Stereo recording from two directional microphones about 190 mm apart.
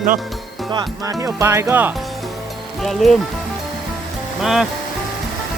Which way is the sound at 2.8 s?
Centre (ahead or behind).